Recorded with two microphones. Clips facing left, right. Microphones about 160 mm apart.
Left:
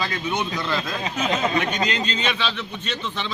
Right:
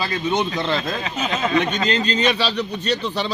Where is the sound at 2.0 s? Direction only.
40° right (ahead or behind).